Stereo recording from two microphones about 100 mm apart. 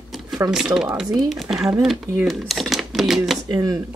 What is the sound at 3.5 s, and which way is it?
Speech, 35° right (ahead or behind).